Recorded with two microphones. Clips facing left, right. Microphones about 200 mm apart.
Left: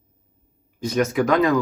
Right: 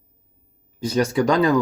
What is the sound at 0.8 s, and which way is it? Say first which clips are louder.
Speech: right 1 dB; 30° right (ahead or behind).